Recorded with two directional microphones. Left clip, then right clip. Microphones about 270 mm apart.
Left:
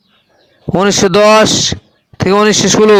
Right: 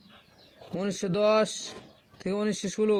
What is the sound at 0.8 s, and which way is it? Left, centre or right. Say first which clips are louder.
A man's voice: left 19 dB; left.